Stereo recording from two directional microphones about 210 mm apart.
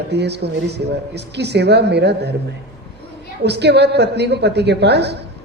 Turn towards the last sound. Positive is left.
turn(degrees=-50)  # may be behind; listen again after turning